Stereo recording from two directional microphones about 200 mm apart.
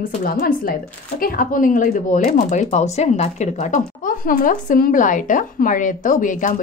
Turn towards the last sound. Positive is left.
turn(degrees=40)  # may be behind; listen again after turning